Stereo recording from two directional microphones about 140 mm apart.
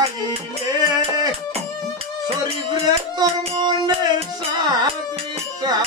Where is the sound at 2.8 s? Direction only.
35° right (ahead or behind).